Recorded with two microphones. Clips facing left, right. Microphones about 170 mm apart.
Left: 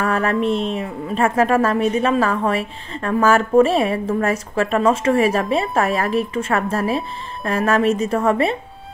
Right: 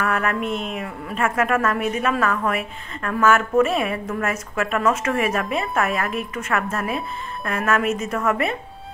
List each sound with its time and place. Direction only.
0.0 s a woman's voice: 30° left (ahead or behind)